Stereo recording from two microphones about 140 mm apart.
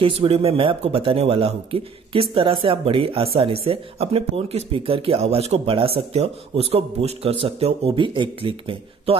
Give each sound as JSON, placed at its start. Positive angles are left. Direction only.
{"t": 0.0, "sound": "speech", "side_deg": -40}